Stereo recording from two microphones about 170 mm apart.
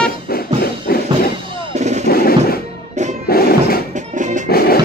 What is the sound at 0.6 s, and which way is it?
Music, 65° left (ahead or behind).